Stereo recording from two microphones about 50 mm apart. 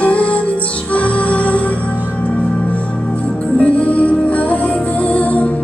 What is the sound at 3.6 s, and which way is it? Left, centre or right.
Music, left.